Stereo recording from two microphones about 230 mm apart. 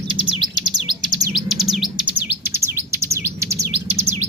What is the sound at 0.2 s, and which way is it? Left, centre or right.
Bird, centre.